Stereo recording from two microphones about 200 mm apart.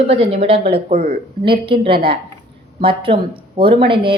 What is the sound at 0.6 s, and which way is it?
Speech, 50° right (ahead or behind).